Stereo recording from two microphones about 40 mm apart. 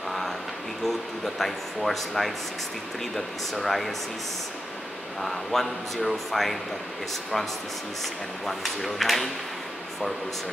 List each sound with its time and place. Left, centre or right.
0.8 s speech: centre
5.2 s speech: centre
8.0 s speech: centre